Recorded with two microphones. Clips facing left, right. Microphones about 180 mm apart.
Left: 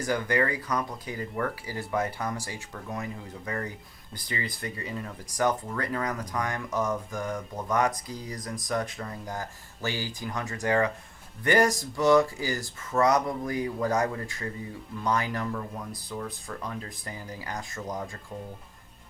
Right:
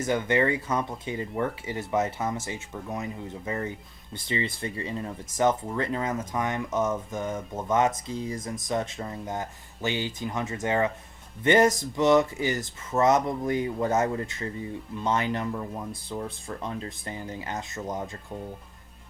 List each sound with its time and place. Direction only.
0.0 s speech: 25° right (ahead or behind)